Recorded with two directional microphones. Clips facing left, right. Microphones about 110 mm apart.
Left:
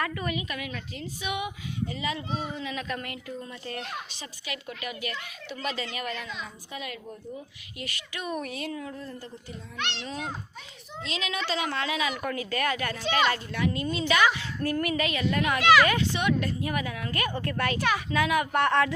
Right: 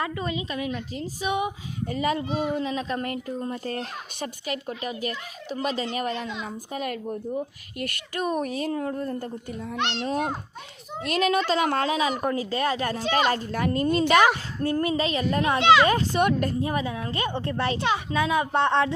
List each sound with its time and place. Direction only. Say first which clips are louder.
0.0 s speech: right 2 dB; 25° right (ahead or behind); by 2.2 s 50° right (ahead or behind)
2.4 s speech: right 8 dB; 60° right (ahead or behind)
2.6 s speech: right 6 dB; 35° right (ahead or behind)
6.4 s a woman's voice: right 7 dB; 45° right (ahead or behind)
14.6 s a woman's voice: right 3 dB; 25° right (ahead or behind)
15.9 s a woman's voice: right 4 dB; 45° right (ahead or behind)
16.6 s a woman's voice: right 4 dB; 30° right (ahead or behind)